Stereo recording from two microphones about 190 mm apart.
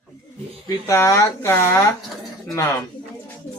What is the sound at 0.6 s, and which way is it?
A man's voice, 15° left (ahead or behind).